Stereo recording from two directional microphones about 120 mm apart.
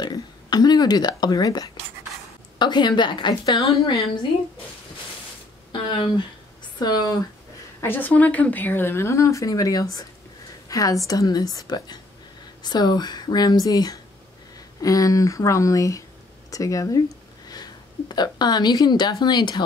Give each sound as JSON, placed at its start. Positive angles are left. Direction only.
{"t": 0.0, "sound": "speech", "side_deg": 35}
{"t": 5.7, "sound": "a sound", "side_deg": 45}
{"t": 6.8, "sound": "speech", "side_deg": 35}
{"t": 7.8, "sound": "a woman's voice", "side_deg": 15}